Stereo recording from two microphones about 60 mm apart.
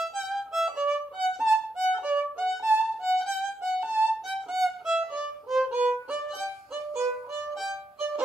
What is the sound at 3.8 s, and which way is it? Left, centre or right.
Violin, right.